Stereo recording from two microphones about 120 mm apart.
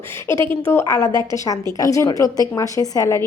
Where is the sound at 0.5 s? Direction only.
20° left (ahead or behind).